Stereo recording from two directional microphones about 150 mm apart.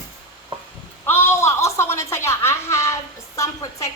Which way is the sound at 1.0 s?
15° left (ahead or behind).